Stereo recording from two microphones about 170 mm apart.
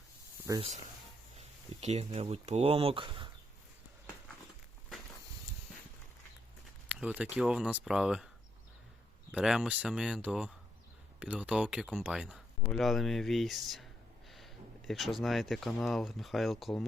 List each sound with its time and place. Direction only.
0.5 s speech: 20° right (ahead or behind)
1.4 s speech: 40° right (ahead or behind)
6.8 s speech: 5° right (ahead or behind)
9.3 s speech: 5° right (ahead or behind)